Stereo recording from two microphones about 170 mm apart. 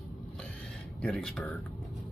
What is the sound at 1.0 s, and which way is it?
Speech, 5° left (ahead or behind).